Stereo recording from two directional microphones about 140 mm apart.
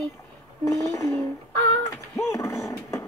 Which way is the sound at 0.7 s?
20° left (ahead or behind).